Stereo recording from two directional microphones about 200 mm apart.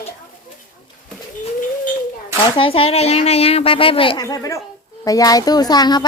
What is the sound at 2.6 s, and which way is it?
Speech, 30° left (ahead or behind).